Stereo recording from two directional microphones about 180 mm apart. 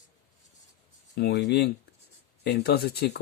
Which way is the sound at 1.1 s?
70° left (ahead or behind).